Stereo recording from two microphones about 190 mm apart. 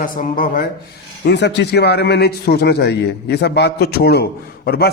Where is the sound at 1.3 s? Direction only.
65° left (ahead or behind).